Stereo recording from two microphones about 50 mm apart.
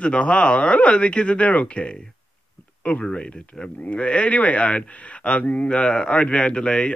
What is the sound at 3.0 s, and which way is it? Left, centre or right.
Speech, centre.